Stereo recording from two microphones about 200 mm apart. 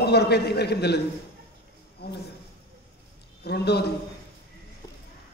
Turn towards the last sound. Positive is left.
turn(degrees=55)  # may be behind; listen again after turning